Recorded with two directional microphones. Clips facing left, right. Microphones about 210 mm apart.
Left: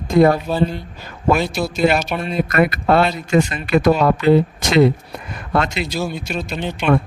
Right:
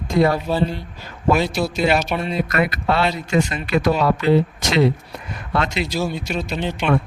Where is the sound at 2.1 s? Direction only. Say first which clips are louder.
Even; centre (ahead or behind).